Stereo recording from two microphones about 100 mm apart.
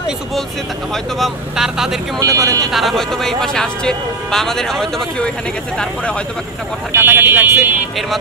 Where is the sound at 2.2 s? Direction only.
35° right (ahead or behind).